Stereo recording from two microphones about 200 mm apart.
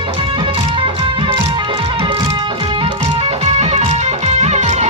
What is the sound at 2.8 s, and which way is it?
Music, 30° right (ahead or behind).